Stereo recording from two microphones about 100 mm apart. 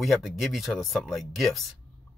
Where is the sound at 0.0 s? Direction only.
Centre (ahead or behind).